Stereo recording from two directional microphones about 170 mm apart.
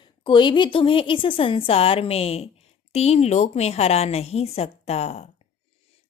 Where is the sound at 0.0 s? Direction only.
30° left (ahead or behind).